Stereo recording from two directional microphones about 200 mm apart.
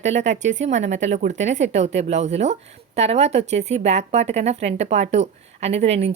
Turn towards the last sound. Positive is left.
turn(degrees=-30)  # may be behind; listen again after turning